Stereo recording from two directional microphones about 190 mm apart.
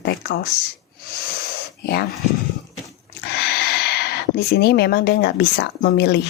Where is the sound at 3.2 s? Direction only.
60° left (ahead or behind).